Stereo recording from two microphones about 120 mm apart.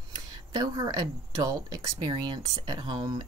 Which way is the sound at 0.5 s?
35° right (ahead or behind).